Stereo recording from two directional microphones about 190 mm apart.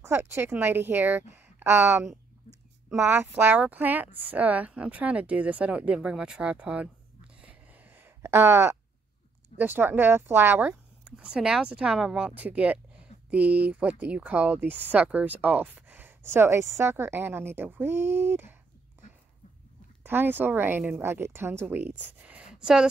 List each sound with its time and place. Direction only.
0.0 s speech: 15° right (ahead or behind)
7.4 s a sound: 10° right (ahead or behind)
9.6 s speech: 10° right (ahead or behind)
20.0 s speech: 10° right (ahead or behind)